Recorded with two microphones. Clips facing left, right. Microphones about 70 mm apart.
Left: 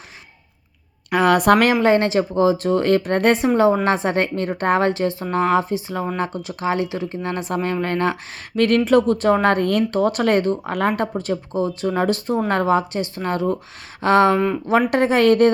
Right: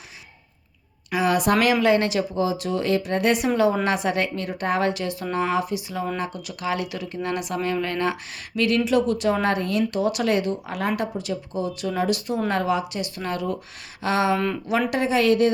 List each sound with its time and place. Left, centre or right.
1.1 s speech: left
3.4 s speech: left
14.3 s speech: centre
14.7 s speech: left